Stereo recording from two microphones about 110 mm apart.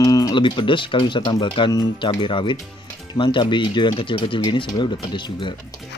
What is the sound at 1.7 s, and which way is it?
Speech, 35° left (ahead or behind).